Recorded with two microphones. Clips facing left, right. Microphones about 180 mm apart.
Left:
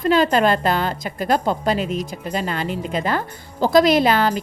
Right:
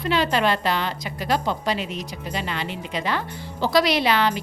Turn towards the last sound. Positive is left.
turn(degrees=50)  # may be behind; listen again after turning